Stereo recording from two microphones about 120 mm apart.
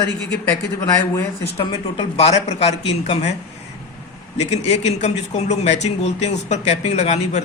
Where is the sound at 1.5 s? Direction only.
50° left (ahead or behind).